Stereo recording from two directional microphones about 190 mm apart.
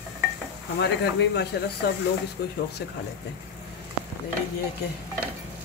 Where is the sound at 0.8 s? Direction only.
60° left (ahead or behind).